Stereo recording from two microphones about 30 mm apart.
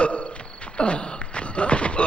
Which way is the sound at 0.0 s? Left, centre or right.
Left.